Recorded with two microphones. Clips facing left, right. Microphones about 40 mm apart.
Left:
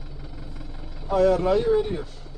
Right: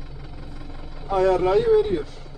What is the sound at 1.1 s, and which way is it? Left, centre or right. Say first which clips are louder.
Speech: right 1 dB; right.